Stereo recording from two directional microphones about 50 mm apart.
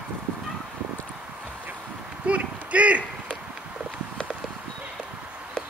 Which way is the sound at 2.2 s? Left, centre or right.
Right.